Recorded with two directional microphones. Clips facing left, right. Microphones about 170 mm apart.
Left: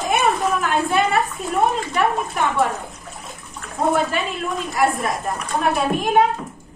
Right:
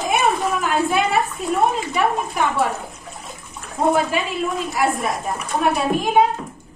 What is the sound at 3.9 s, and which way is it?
A woman's voice, centre (ahead or behind).